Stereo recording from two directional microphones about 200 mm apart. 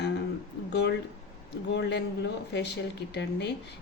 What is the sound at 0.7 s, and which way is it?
Speech, 60° left (ahead or behind).